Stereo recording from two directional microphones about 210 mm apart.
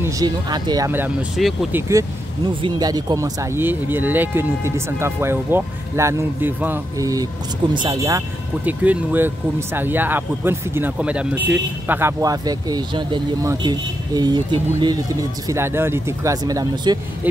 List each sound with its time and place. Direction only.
0.0 s speech: 20° right (ahead or behind)